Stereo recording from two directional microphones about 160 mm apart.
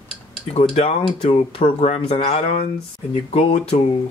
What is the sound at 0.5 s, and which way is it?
Speech, 40° left (ahead or behind).